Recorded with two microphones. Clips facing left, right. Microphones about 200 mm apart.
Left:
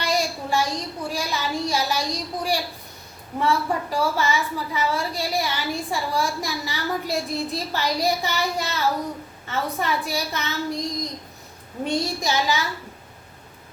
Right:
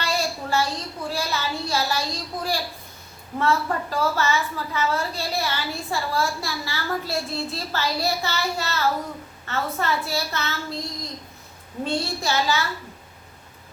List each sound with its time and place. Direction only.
0.0 s a woman's voice: 15° left (ahead or behind)